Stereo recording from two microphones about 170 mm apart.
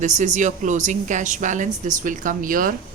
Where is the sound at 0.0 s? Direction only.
45° right (ahead or behind).